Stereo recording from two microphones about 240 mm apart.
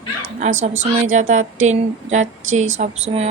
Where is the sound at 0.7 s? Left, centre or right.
Right.